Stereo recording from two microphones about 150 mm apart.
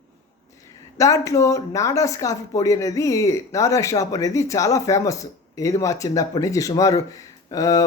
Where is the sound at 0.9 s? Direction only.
20° left (ahead or behind).